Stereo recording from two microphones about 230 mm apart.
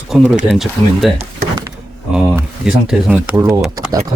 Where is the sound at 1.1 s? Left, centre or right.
Centre.